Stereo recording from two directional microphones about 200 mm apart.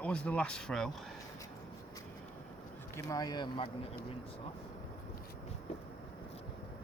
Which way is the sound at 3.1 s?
20° left (ahead or behind).